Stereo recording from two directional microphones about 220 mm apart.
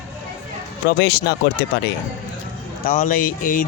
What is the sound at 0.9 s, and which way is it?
Speech, 45° left (ahead or behind).